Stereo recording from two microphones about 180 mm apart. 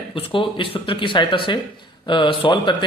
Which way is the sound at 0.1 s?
30° left (ahead or behind).